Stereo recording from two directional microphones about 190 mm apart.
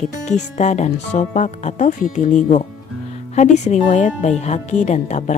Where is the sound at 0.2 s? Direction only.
35° left (ahead or behind).